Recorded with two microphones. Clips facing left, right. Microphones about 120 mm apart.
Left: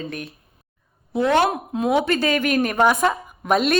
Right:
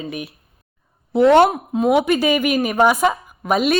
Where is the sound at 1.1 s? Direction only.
25° right (ahead or behind).